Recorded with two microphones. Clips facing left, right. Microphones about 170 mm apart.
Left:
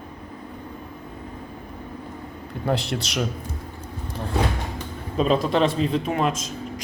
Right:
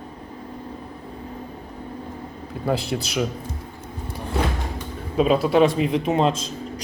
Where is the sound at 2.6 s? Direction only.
Centre (ahead or behind).